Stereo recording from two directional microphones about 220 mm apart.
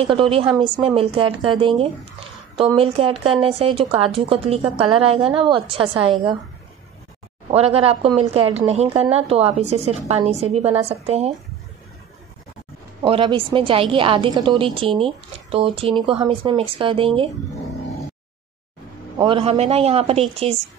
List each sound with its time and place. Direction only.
0.0 s a woman's voice: 25° right (ahead or behind)
7.5 s a woman's voice: 25° right (ahead or behind)
13.0 s a woman's voice: 20° right (ahead or behind)
19.1 s a woman's voice: 20° right (ahead or behind)